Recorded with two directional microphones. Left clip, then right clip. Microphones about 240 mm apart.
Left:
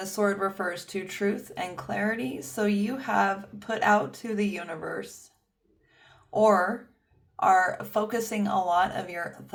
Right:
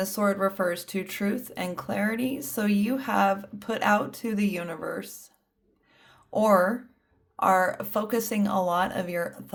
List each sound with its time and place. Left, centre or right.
0.0 s speech: right
6.1 s a sound: right
7.3 s speech: right